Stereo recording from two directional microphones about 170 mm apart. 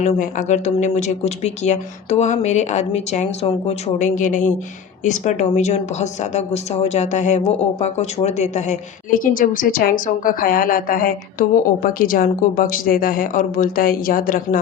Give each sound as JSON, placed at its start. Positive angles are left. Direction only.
{"t": 0.0, "sound": "speech", "side_deg": 45}